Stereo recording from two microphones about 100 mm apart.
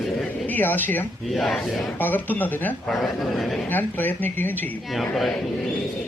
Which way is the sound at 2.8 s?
Centre (ahead or behind).